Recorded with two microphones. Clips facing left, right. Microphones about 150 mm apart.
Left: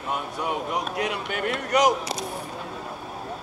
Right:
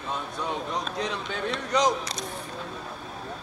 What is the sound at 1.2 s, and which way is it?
Speech, 60° left (ahead or behind).